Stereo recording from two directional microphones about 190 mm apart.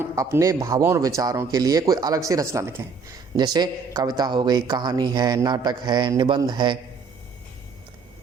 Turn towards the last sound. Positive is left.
turn(degrees=-25)  # may be behind; listen again after turning